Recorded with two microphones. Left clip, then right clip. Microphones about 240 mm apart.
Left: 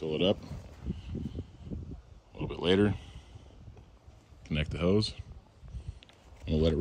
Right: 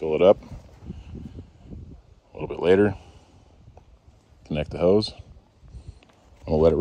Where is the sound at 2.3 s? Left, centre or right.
Centre.